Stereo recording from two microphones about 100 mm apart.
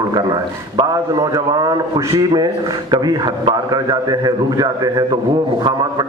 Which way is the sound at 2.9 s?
50° right (ahead or behind).